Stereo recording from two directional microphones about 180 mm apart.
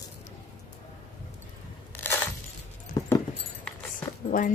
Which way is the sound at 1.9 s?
10° left (ahead or behind).